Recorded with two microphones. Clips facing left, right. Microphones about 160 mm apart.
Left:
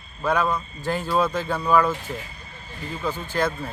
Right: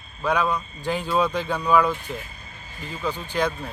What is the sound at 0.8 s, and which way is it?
Speech, 15° right (ahead or behind).